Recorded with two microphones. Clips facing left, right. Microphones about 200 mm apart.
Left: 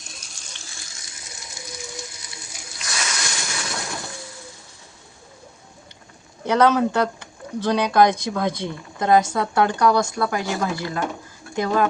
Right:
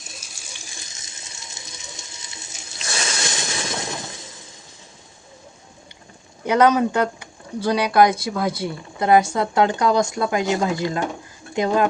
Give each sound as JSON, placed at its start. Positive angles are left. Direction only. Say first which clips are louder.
{"t": 0.0, "sound": "water tap", "louder": "right 2 dB", "side_deg": -5}
{"t": 6.4, "sound": "speech", "louder": "right 1 dB", "side_deg": -10}